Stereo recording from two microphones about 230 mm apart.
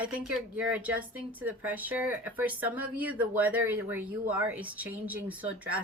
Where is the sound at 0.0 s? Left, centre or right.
Centre.